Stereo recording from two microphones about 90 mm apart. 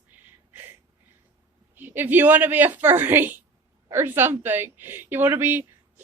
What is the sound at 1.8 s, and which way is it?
Speech, 20° right (ahead or behind).